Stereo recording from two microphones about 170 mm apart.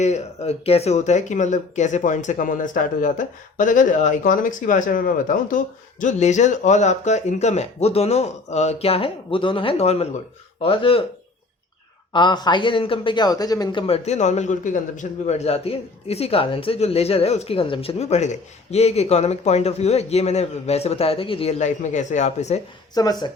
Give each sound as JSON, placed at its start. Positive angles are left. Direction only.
{"t": 0.0, "sound": "a man's voice", "side_deg": 40}
{"t": 12.1, "sound": "speech", "side_deg": 25}
{"t": 13.8, "sound": "a man's voice", "side_deg": 40}
{"t": 23.0, "sound": "speech", "side_deg": 20}